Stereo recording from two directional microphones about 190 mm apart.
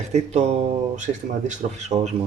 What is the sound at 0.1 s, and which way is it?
Speech, 35° right (ahead or behind).